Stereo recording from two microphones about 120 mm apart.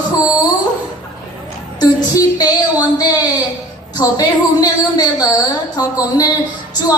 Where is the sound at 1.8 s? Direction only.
35° left (ahead or behind).